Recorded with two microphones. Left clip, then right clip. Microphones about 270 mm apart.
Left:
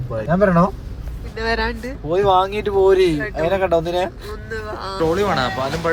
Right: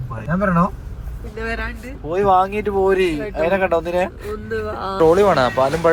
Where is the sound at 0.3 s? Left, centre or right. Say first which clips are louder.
Left 4 dB; left.